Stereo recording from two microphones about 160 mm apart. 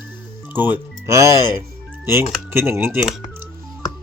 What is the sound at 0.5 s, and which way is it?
Speech, 10° right (ahead or behind).